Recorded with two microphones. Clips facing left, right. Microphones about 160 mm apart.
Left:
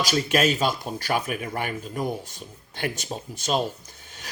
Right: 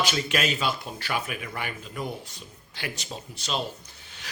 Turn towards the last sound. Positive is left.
turn(degrees=45)  # may be behind; listen again after turning